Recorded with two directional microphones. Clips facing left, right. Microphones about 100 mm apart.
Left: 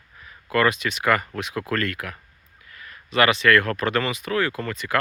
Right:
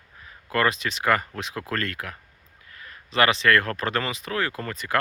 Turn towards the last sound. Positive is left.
turn(degrees=-35)  # may be behind; listen again after turning